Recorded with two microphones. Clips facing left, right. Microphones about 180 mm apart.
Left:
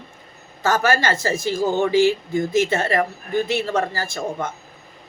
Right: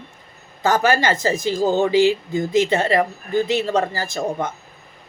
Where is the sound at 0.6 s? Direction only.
15° right (ahead or behind).